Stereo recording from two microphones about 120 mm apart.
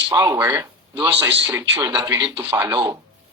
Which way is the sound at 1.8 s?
30° right (ahead or behind).